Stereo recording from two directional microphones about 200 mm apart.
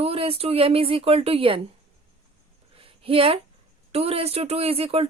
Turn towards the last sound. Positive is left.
turn(degrees=-30)  # may be behind; listen again after turning